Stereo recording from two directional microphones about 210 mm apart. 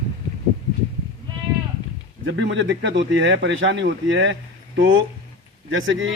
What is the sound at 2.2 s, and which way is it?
Speech, 60° right (ahead or behind).